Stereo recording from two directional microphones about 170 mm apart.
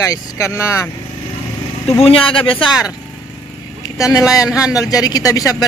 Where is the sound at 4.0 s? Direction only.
20° left (ahead or behind).